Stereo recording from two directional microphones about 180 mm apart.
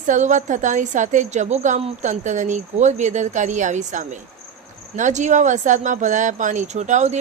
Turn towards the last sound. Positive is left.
turn(degrees=-40)  # may be behind; listen again after turning